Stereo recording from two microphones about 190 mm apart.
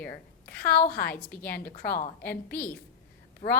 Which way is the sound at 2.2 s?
10° left (ahead or behind).